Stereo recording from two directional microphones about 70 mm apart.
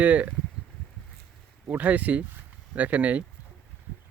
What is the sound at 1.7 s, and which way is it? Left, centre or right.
Speech, right.